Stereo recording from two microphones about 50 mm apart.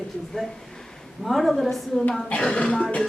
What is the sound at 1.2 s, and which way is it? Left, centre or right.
Speech, centre.